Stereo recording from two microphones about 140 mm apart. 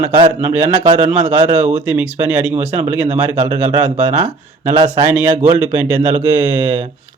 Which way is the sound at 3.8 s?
10° right (ahead or behind).